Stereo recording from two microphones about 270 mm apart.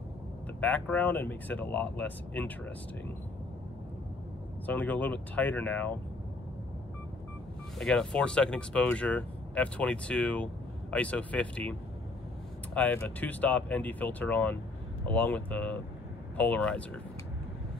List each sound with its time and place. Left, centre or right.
0.6 s speech: centre
4.6 s speech: centre
7.8 s speech: centre
12.7 s speech: centre